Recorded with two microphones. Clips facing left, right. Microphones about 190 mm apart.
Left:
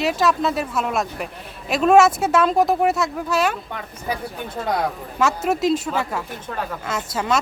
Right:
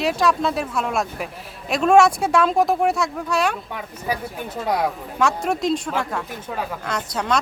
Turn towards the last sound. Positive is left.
turn(degrees=5)  # may be behind; listen again after turning